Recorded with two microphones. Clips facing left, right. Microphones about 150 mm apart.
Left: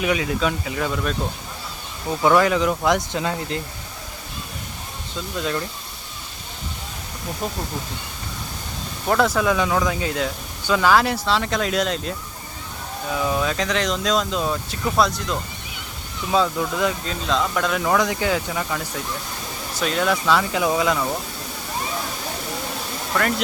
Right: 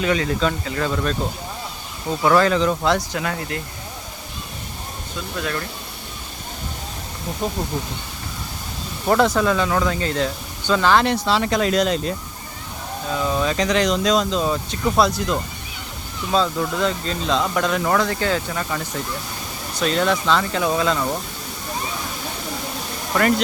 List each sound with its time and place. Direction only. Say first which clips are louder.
0.0 s speech: right 1 dB; 10° left (ahead or behind)
2.3 s speech: right 2 dB; 10° left (ahead or behind)
5.4 s speech: left 1 dB; 20° left (ahead or behind)
7.4 s speech: right 3 dB; centre (ahead or behind)
9.0 s speech: right 2 dB; centre (ahead or behind)
18.0 s speech: even; 15° left (ahead or behind)
19.8 s speech: right 2 dB; 5° left (ahead or behind)
23.1 s speech: right 3 dB; 5° right (ahead or behind)